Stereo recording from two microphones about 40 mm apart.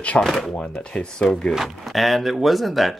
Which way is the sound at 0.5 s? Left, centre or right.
Left.